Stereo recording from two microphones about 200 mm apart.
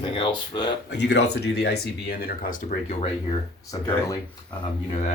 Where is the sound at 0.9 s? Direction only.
60° left (ahead or behind); by 3.1 s 40° left (ahead or behind).